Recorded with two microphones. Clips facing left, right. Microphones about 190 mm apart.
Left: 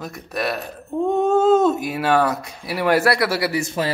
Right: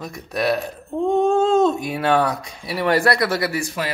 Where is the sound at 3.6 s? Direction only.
25° left (ahead or behind).